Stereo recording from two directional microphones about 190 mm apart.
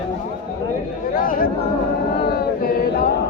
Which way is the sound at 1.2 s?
45° left (ahead or behind).